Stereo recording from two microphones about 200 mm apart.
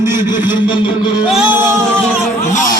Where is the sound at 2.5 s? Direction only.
40° left (ahead or behind).